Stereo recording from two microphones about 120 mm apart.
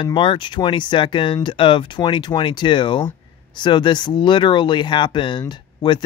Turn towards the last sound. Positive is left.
turn(degrees=40)  # may be behind; listen again after turning